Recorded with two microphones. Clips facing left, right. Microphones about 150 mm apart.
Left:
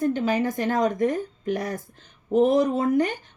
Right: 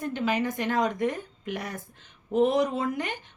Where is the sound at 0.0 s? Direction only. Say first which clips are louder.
Left 5 dB; 35° left (ahead or behind).